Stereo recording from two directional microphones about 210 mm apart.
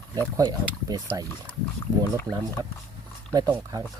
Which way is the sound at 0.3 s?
20° right (ahead or behind).